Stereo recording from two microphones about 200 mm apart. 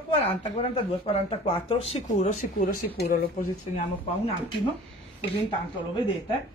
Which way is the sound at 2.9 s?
55° left (ahead or behind).